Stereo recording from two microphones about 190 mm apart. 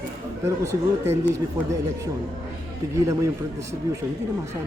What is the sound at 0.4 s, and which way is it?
Speech, 15° right (ahead or behind).